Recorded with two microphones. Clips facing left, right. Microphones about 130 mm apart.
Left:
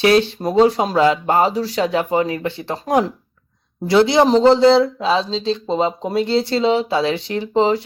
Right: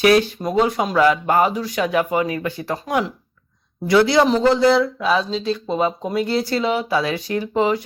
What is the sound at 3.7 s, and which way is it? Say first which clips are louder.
Speech: left 1 dB; 25° left (ahead or behind).